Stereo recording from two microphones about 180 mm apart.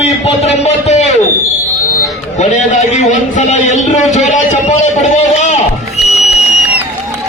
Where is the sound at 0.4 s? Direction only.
40° left (ahead or behind).